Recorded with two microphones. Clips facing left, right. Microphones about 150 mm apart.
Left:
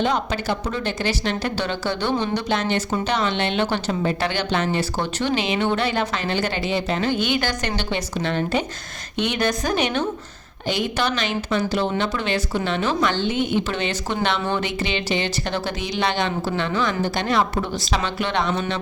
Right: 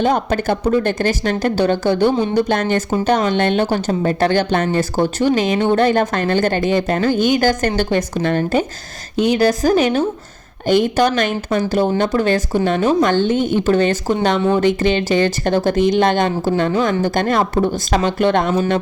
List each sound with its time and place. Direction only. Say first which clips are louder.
0.0 s speech: right 6 dB; 50° right (ahead or behind)
9.1 s a woman's voice: right 8 dB; 35° right (ahead or behind)